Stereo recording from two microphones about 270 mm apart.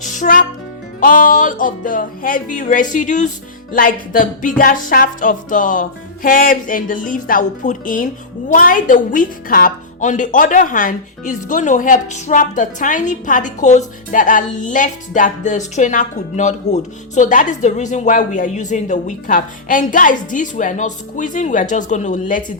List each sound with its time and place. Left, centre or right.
0.0 s a woman's voice: left